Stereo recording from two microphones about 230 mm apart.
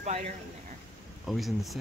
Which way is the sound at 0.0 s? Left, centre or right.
Right.